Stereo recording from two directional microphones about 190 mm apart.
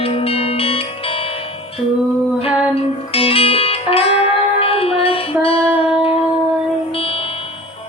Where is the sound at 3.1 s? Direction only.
30° left (ahead or behind).